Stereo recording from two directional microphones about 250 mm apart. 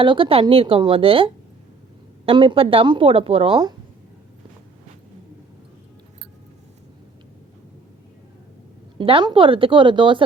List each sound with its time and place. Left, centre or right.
0.0 s speech: centre
9.0 s speech: centre